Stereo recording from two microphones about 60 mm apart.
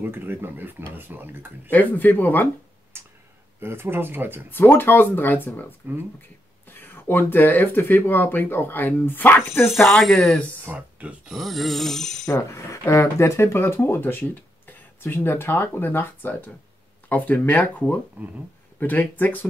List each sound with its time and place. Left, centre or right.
0.0 s speech: right
1.7 s speech: left
2.9 s a sound: right
3.5 s speech: right
4.5 s speech: left
6.7 s speech: left
9.8 s a sound: centre
10.1 s speech: centre
10.6 s speech: right
11.3 s a sound: centre
12.3 s speech: left
18.2 s speech: right
18.8 s speech: left